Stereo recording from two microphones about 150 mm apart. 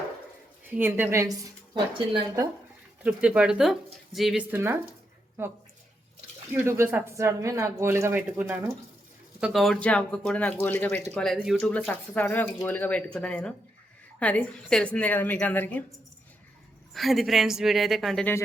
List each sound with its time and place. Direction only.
0.8 s a woman's voice: 15° right (ahead or behind)
1.7 s speech: 30° right (ahead or behind)
3.0 s speech: 5° right (ahead or behind)
4.5 s a woman's voice: 15° right (ahead or behind)
6.5 s a woman's voice: 15° right (ahead or behind)
9.4 s speech: centre (ahead or behind)
11.1 s speech: 5° left (ahead or behind)
11.7 s speech: 10° left (ahead or behind)
16.9 s speech: centre (ahead or behind)